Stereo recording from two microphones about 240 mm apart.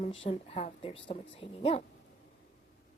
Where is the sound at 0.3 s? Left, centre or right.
Left.